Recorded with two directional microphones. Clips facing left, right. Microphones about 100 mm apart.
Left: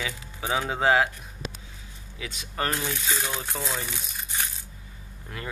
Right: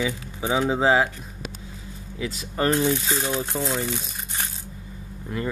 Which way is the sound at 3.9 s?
25° right (ahead or behind).